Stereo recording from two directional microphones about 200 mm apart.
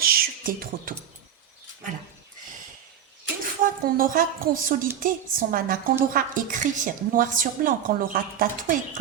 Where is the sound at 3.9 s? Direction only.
45° right (ahead or behind).